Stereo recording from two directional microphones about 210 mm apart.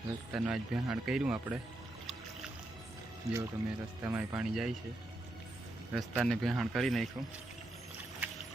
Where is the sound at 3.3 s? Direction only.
15° right (ahead or behind).